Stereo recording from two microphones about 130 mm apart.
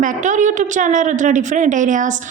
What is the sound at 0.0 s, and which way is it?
A woman's voice, 80° right.